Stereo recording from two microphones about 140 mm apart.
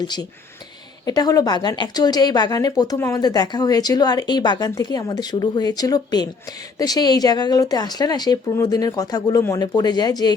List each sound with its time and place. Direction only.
1.0 s speech: 30° left (ahead or behind)